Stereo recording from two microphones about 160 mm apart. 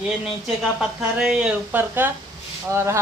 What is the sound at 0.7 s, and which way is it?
Speech, 5° right (ahead or behind).